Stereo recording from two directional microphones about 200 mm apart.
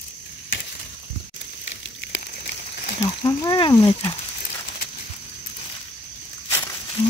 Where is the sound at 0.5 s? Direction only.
70° left (ahead or behind).